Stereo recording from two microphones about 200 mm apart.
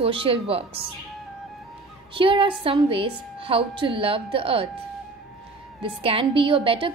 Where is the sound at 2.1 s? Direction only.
25° right (ahead or behind).